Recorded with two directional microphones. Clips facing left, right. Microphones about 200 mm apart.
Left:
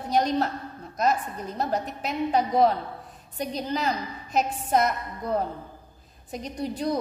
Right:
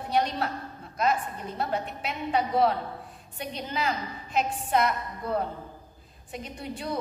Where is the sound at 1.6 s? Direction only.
40° left (ahead or behind).